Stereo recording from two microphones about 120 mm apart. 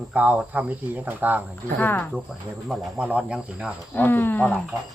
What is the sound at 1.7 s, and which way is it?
Speech, 15° left (ahead or behind).